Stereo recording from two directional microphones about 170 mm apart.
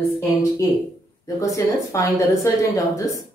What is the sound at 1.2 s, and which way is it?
Speech, 20° left (ahead or behind).